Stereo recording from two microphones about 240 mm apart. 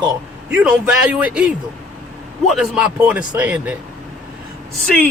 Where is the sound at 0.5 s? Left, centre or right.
Centre.